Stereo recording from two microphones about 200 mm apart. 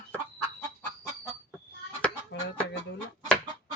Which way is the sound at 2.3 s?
65° left (ahead or behind).